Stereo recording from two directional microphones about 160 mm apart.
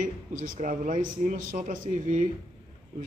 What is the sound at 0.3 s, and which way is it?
A man's voice, 55° right (ahead or behind).